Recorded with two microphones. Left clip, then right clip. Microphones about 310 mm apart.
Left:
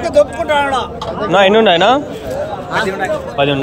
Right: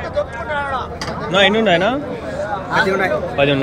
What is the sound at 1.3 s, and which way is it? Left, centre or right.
Speech, centre.